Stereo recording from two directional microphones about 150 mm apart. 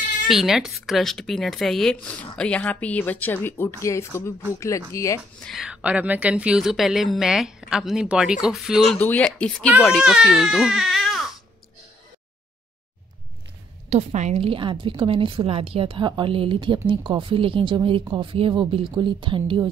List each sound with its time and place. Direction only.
0.3 s a woman's voice: centre (ahead or behind); by 5.2 s 20° left (ahead or behind)
5.4 s a woman's voice: centre (ahead or behind)
8.9 s speech: 10° left (ahead or behind)
9.9 s speech: centre (ahead or behind)
13.8 s a woman's voice: 50° right (ahead or behind); by 19.7 s 35° right (ahead or behind)